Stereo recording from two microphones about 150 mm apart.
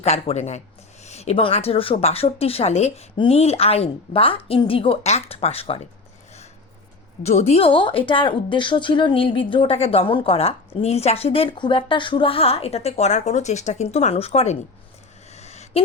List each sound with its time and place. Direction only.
0.0 s a woman's voice: 45° left (ahead or behind)
7.2 s speech: 45° left (ahead or behind)
15.3 s a sound: 45° left (ahead or behind)